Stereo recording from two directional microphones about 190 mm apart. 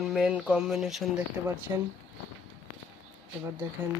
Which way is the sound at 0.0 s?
Centre (ahead or behind).